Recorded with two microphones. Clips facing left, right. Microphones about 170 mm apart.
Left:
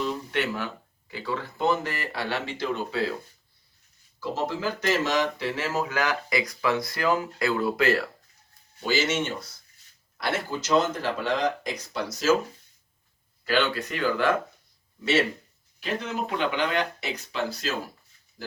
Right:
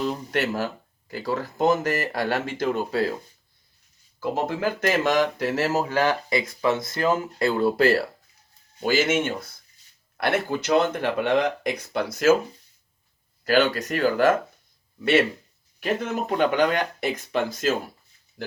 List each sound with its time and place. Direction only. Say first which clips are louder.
0.3 s speech: right 3 dB; 40° right (ahead or behind)
4.2 s speech: right 4 dB; 55° right (ahead or behind); by 8.0 s 35° right (ahead or behind)
8.8 s speech: right 4 dB; 50° right (ahead or behind)
13.4 s speech: right 5 dB; 45° right (ahead or behind)
15.8 s speech: right 4 dB; 50° right (ahead or behind)
18.4 s speech: right 5 dB; 60° right (ahead or behind)